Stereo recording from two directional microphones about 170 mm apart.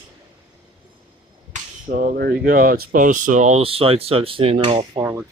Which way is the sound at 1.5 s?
55° right (ahead or behind).